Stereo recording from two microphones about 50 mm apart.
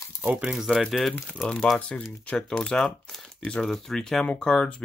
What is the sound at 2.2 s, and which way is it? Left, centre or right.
Speech, centre.